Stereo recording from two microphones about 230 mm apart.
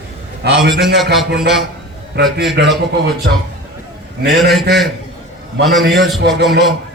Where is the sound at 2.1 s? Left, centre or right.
Right.